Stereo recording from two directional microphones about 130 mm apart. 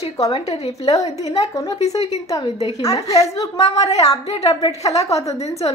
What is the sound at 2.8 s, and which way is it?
Speech, 25° left (ahead or behind).